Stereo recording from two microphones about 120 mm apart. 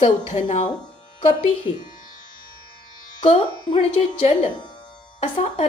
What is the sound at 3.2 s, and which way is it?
A woman's voice, 45° left (ahead or behind).